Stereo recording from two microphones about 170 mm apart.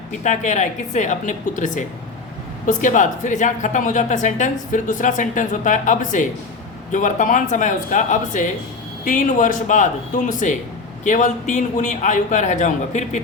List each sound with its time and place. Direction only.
0.1 s speech: 45° left (ahead or behind)